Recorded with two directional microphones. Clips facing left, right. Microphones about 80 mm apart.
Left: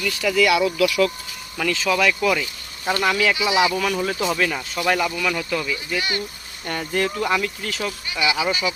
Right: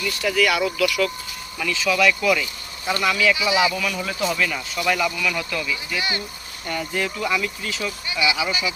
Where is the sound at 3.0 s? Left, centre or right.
Left.